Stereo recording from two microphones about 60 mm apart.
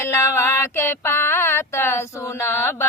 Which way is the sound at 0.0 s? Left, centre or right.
Left.